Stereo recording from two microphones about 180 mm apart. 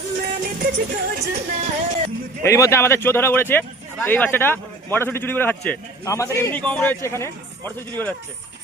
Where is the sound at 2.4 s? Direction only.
15° left (ahead or behind).